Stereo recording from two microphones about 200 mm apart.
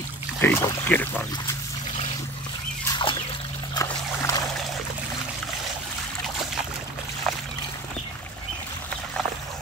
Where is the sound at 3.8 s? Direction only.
20° left (ahead or behind).